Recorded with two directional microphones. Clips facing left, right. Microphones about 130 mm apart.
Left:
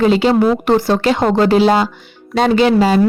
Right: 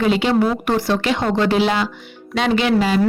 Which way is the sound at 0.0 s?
35° left (ahead or behind).